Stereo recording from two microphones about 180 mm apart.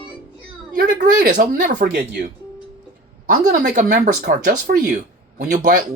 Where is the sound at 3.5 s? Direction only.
45° right (ahead or behind).